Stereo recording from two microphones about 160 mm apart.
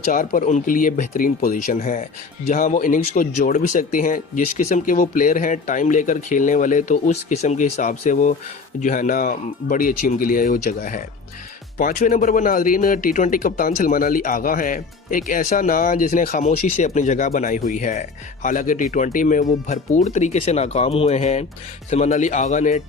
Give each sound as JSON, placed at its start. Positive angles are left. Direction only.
{"t": 0.1, "sound": "speech", "side_deg": 60}
{"t": 1.7, "sound": "speech", "side_deg": 50}